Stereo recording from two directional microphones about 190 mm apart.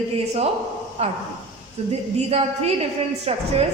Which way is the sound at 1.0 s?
30° right (ahead or behind).